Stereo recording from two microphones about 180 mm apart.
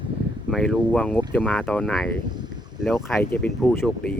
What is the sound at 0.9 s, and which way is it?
Speech, 10° left (ahead or behind).